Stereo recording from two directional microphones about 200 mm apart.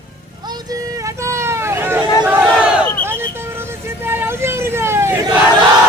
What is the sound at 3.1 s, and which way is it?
Vehicle, 10° right (ahead or behind).